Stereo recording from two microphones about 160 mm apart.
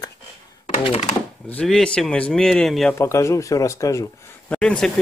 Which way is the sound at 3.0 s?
20° left (ahead or behind).